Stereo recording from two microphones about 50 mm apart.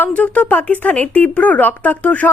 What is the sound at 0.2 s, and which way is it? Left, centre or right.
A woman's voice, left.